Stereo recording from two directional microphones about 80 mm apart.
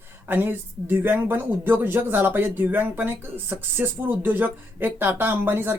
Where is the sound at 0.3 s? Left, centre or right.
Right.